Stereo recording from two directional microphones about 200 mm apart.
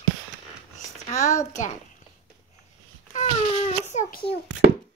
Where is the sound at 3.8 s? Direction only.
35° left (ahead or behind).